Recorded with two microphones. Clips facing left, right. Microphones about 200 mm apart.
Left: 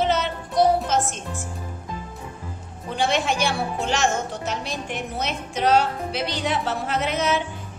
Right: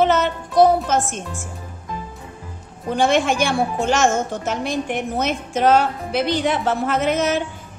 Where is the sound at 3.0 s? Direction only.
50° right (ahead or behind).